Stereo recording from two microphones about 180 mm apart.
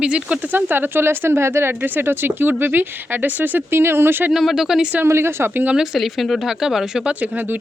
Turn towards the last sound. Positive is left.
turn(degrees=-10)  # may be behind; listen again after turning